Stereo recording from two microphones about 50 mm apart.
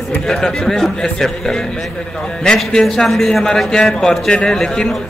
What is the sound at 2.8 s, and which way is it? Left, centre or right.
Speech, centre.